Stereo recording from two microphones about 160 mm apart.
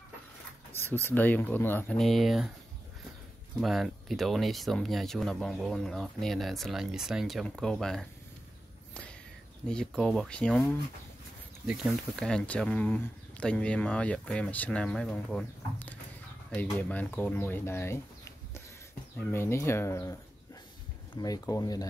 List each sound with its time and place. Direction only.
0.8 s speech: 15° left (ahead or behind); by 2.5 s centre (ahead or behind)
3.6 s speech: centre (ahead or behind)
9.7 s speech: 5° left (ahead or behind)
11.6 s speech: 5° right (ahead or behind); by 18.0 s 15° left (ahead or behind)
19.1 s speech: 15° left (ahead or behind)
21.2 s speech: 20° left (ahead or behind)